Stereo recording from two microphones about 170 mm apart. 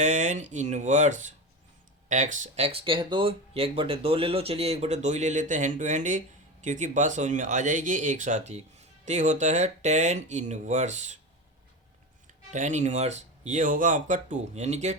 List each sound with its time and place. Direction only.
0.0 s speech: 45° right (ahead or behind)
12.5 s speech: 45° right (ahead or behind)